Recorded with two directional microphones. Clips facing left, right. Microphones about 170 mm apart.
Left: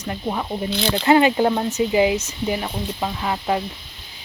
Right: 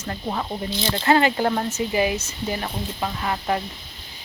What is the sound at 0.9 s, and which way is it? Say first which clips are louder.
Speech: left 3 dB; 15° left (ahead or behind).